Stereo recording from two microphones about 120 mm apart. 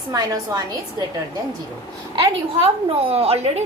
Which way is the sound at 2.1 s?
50° right (ahead or behind).